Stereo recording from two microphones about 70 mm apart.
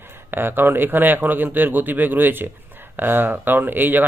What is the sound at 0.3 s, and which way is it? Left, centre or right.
A man's voice, right.